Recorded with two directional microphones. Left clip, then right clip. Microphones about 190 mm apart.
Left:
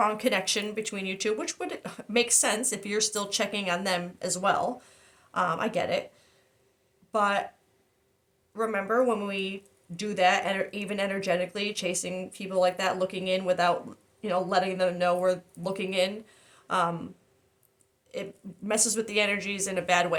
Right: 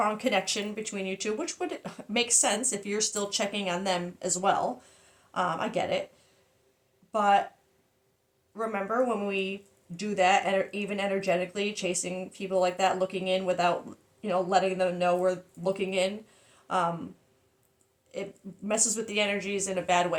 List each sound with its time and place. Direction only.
0.0 s speech: 40° left (ahead or behind)
7.1 s speech: 40° left (ahead or behind)
8.5 s speech: 40° left (ahead or behind)
18.1 s speech: 40° left (ahead or behind)